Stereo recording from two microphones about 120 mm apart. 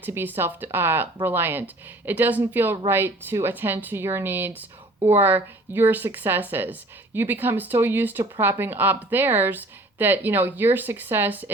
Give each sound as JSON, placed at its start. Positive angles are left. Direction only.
{"t": 0.0, "sound": "speech", "side_deg": -15}